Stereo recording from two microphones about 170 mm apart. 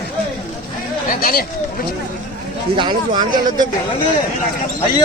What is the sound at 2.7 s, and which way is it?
Speech, 25° right (ahead or behind).